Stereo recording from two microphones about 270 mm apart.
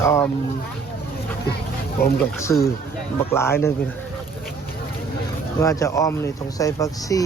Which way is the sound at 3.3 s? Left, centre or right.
Centre.